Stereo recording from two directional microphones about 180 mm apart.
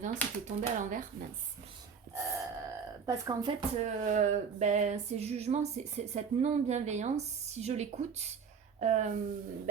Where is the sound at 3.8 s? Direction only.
40° right (ahead or behind).